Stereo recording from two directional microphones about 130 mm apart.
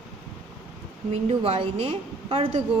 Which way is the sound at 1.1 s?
50° right (ahead or behind).